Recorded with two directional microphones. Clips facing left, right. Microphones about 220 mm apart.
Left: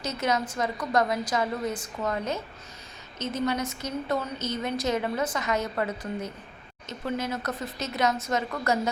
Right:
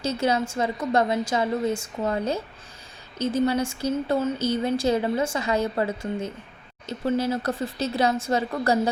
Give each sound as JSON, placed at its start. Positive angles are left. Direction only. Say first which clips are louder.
{"t": 0.0, "sound": "speech", "louder": "right 4 dB", "side_deg": -30}